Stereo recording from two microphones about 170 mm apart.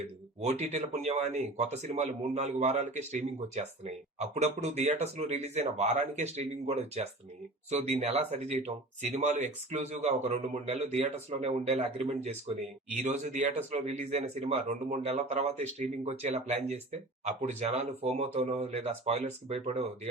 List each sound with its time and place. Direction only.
0.6 s speech: 40° right (ahead or behind)